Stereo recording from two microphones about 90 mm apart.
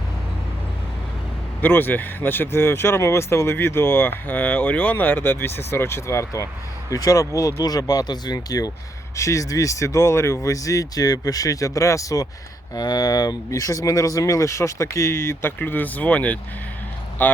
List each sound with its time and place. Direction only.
1.6 s speech: 20° left (ahead or behind)